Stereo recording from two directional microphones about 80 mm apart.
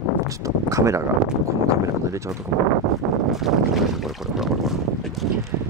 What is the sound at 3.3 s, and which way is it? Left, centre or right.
Boat, centre.